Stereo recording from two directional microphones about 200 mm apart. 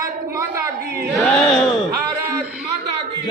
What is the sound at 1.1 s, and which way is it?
Chant, centre (ahead or behind).